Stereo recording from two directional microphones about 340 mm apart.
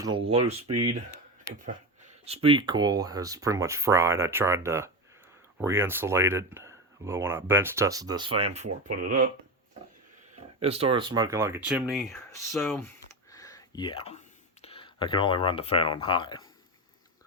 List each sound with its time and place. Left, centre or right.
0.0 s speech: centre
10.6 s speech: centre